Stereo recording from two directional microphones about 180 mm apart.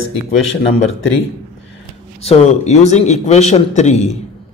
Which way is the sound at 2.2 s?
40° left (ahead or behind).